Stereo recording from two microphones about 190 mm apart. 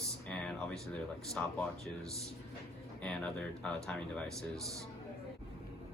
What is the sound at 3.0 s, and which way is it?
Speech, 5° left (ahead or behind).